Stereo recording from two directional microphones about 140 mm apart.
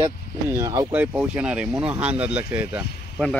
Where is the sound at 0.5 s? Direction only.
25° right (ahead or behind).